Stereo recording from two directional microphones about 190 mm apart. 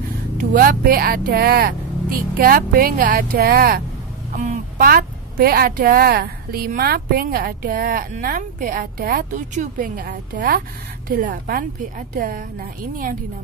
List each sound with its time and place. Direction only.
0.3 s a woman's voice: 50° right (ahead or behind)
4.4 s a woman's voice: 40° right (ahead or behind)